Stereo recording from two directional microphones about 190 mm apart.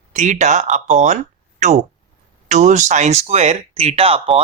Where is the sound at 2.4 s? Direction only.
40° right (ahead or behind).